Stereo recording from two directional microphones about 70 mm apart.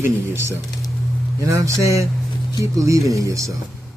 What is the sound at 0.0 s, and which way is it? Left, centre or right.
Speech, right.